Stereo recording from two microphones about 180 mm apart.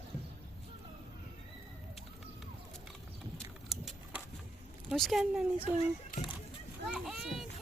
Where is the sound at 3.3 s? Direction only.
Centre (ahead or behind).